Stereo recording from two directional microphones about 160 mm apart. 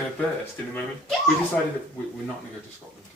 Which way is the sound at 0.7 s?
Centre (ahead or behind).